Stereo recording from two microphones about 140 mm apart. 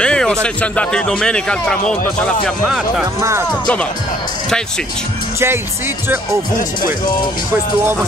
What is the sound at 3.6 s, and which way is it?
Speech, 10° left (ahead or behind).